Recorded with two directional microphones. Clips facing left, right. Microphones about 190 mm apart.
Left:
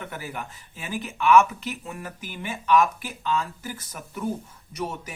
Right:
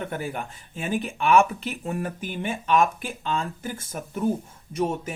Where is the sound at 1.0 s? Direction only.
30° right (ahead or behind).